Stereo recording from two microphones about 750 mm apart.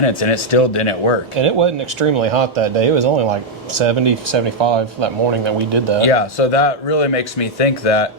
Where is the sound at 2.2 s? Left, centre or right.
Right.